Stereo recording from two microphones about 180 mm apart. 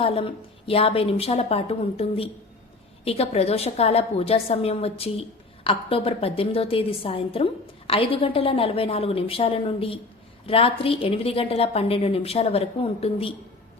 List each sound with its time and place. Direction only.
0.0 s a woman's voice: 30° left (ahead or behind)